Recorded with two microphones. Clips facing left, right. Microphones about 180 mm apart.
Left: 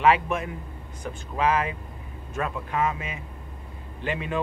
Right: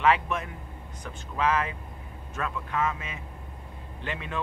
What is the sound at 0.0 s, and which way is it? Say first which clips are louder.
Speech: left 3 dB; 10° left (ahead or behind).